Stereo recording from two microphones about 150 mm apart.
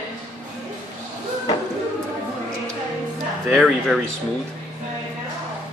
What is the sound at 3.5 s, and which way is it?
Speech, centre (ahead or behind).